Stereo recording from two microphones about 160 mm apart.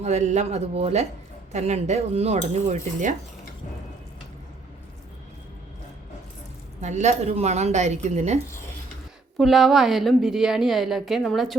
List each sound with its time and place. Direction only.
0.0 s a woman's voice: 45° right (ahead or behind)
6.8 s a woman's voice: 45° right (ahead or behind)
9.4 s a woman's voice: centre (ahead or behind)